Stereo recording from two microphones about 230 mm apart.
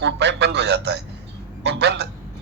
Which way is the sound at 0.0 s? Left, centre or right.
Right.